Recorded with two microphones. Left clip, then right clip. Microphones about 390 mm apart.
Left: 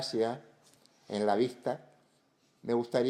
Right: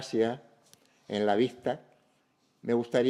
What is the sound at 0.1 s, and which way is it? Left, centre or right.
Speech, right.